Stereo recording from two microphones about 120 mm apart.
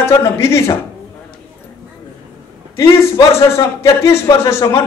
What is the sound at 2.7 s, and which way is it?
A man's voice, 25° left (ahead or behind).